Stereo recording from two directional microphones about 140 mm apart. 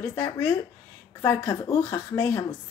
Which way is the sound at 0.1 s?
20° left (ahead or behind).